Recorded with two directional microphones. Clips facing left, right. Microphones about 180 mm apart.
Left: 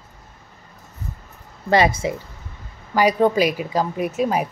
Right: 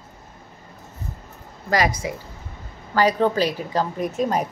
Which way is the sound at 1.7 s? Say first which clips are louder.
Left 4 dB; 25° left (ahead or behind).